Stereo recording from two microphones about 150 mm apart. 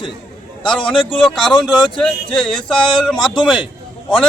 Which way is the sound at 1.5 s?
30° left (ahead or behind).